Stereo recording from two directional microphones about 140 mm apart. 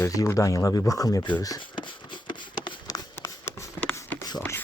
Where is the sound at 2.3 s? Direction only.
30° left (ahead or behind).